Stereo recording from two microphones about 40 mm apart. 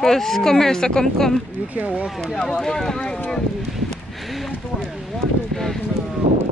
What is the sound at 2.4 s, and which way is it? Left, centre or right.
Speech, centre.